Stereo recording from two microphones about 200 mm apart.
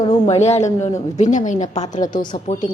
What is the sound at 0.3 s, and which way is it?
Speech, 35° left (ahead or behind).